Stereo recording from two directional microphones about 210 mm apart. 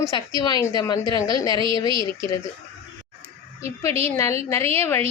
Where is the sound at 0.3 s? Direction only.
20° left (ahead or behind).